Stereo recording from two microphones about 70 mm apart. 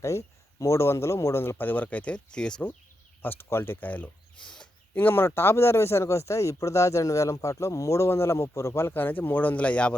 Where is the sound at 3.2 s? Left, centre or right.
Left.